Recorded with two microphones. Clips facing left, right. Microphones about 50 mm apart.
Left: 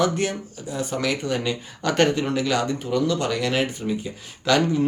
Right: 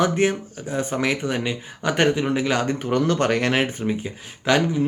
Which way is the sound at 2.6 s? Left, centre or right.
Right.